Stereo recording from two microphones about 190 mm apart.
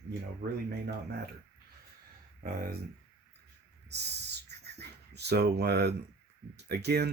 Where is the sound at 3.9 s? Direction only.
60° right (ahead or behind).